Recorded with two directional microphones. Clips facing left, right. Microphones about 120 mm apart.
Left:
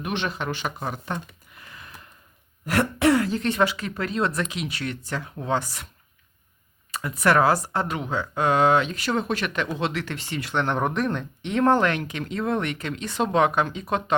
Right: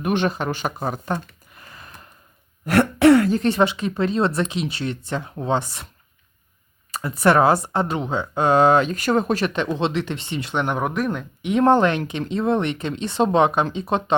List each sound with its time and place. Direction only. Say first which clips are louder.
0.0 s speech: right 6 dB; 45° right (ahead or behind)
1.5 s a sound: right 2 dB; 40° right (ahead or behind)
2.6 s throat clearing: right 6 dB; 65° right (ahead or behind)
3.3 s speech: right 4 dB; 30° right (ahead or behind)
6.9 s speech: right 3 dB; 35° right (ahead or behind); by 10.8 s 15° right (ahead or behind)
10.8 s speech: right 1 dB; 5° right (ahead or behind)
11.5 s speech: right 4 dB; 20° right (ahead or behind)